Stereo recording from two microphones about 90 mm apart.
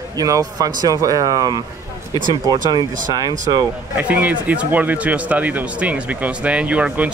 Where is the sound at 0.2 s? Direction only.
40° right (ahead or behind).